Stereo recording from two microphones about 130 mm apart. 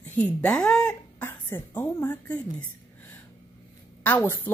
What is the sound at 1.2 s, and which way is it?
A woman's voice, 15° left (ahead or behind).